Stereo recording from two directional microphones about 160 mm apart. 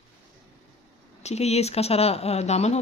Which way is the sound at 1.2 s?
45° left (ahead or behind).